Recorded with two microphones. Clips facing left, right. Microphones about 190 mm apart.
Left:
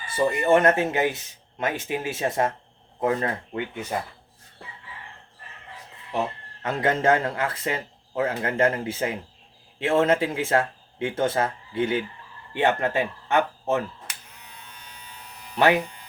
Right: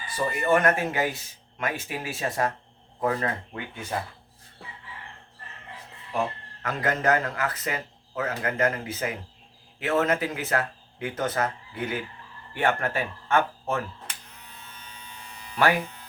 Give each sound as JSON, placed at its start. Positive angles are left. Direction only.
{"t": 0.1, "sound": "speech", "side_deg": 25}
{"t": 6.6, "sound": "speech", "side_deg": 25}
{"t": 15.5, "sound": "speech", "side_deg": 20}